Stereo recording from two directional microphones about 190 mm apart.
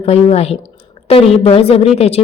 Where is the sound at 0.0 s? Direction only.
35° left (ahead or behind).